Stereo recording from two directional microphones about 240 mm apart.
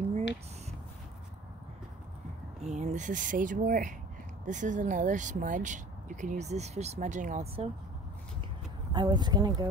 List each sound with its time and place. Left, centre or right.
2.6 s speech: right
8.9 s speech: centre